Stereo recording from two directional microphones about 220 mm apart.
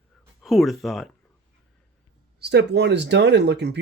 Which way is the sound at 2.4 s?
50° right (ahead or behind).